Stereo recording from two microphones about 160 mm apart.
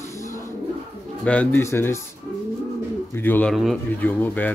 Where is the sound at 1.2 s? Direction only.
10° left (ahead or behind).